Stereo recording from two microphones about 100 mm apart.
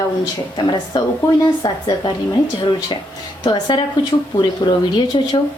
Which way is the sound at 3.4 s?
50° left (ahead or behind).